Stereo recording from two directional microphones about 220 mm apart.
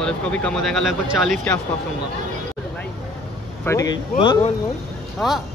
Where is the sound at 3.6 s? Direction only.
15° left (ahead or behind).